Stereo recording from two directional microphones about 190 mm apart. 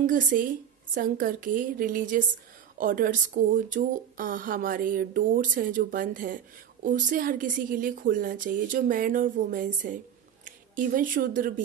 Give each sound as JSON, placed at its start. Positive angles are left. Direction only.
{"t": 0.0, "sound": "speech", "side_deg": -45}